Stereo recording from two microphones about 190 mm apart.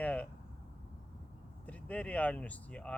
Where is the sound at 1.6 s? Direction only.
5° left (ahead or behind).